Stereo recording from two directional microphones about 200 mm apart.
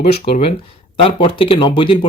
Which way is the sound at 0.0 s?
30° left (ahead or behind).